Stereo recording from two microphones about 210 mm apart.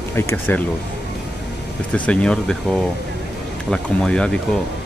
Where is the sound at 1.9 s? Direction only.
5° left (ahead or behind).